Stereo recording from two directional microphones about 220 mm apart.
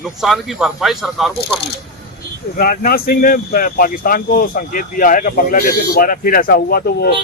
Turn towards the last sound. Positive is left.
turn(degrees=45)  # may be behind; listen again after turning